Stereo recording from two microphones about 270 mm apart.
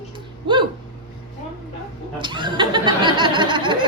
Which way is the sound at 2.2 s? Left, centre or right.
Centre.